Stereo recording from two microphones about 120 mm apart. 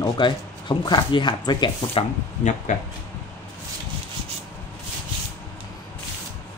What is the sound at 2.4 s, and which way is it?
Speech, 90° left.